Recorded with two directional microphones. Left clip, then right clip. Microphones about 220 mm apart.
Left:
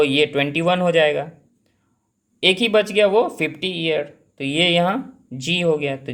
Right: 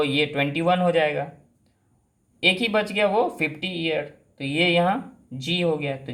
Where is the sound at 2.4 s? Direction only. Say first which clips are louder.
Left 4 dB; 35° left (ahead or behind).